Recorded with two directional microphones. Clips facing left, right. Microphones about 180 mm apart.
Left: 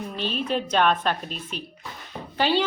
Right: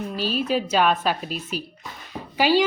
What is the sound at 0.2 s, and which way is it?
A woman's voice, 5° right (ahead or behind).